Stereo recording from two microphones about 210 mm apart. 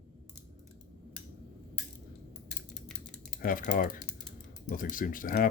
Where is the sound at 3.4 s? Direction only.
40° left (ahead or behind).